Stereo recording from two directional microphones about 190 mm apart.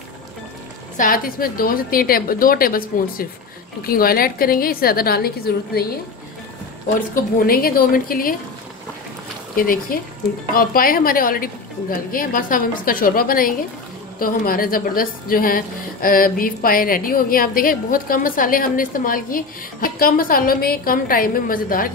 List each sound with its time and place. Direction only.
0.9 s a woman's voice: 45° left (ahead or behind)
7.3 s a woman's voice: 50° left (ahead or behind)
9.6 s a woman's voice: 50° left (ahead or behind)